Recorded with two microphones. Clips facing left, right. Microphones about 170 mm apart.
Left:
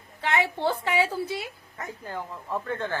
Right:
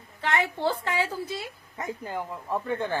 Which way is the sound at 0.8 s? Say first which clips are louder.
Left 3 dB; 10° left (ahead or behind).